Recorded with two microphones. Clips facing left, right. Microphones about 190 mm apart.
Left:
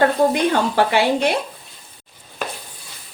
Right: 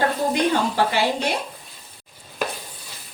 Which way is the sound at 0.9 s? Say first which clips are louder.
Left 5 dB; 65° left (ahead or behind).